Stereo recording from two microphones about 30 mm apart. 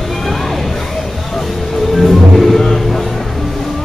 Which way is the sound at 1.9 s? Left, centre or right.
Centre.